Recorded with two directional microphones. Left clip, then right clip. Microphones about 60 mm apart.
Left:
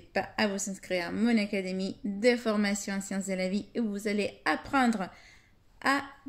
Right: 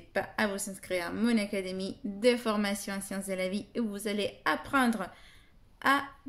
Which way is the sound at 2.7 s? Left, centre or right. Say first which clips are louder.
Left 2 dB; centre.